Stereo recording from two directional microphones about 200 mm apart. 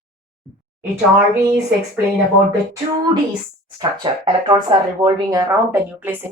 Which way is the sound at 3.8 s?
20° right (ahead or behind).